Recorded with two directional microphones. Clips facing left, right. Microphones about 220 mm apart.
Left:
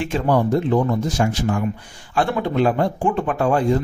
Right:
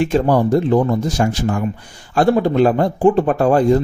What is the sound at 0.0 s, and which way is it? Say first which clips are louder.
Speech: right 4 dB; 40° right (ahead or behind).